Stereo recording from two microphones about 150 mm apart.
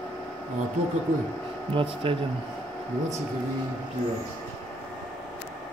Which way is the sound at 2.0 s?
35° right (ahead or behind).